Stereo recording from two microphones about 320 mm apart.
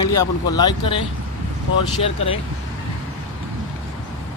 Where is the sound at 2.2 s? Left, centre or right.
Centre.